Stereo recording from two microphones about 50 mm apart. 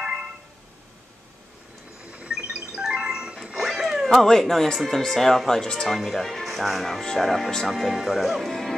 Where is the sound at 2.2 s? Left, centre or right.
Centre.